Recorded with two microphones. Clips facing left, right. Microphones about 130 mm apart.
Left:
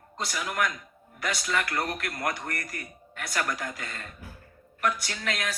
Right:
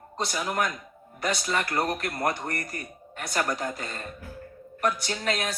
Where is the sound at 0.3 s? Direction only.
30° right (ahead or behind).